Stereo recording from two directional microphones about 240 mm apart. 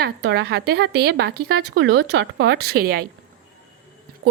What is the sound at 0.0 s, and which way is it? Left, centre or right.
A woman's voice, right.